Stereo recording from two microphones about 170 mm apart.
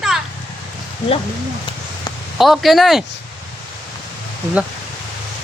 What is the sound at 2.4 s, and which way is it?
Speech, centre (ahead or behind).